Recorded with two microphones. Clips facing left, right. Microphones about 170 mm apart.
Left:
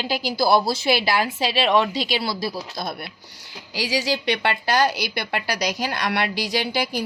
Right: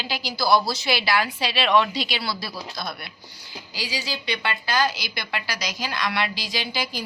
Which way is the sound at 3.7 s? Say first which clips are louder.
Left 8 dB; 90° left.